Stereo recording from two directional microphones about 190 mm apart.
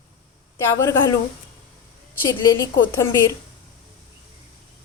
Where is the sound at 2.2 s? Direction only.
20° left (ahead or behind).